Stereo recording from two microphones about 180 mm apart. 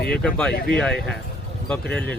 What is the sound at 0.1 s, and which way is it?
Speech, 5° left (ahead or behind).